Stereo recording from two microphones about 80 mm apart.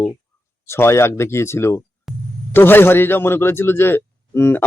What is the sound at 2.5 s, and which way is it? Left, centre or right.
Speech, left.